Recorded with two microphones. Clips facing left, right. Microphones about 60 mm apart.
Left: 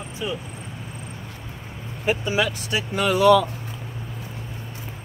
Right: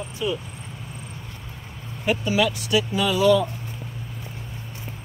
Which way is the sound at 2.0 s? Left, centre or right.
Left.